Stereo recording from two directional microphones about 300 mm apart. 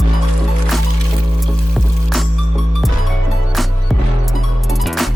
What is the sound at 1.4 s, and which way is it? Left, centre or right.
Music, centre.